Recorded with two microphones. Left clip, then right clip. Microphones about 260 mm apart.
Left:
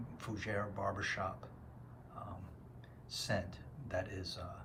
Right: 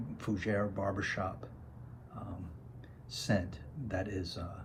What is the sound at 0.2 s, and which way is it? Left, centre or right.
Speech, centre.